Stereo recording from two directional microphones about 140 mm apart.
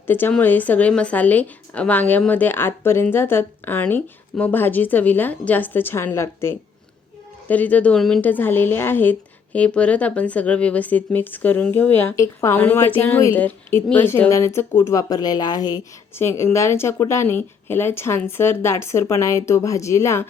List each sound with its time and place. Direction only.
0.1 s a woman's voice: 15° left (ahead or behind)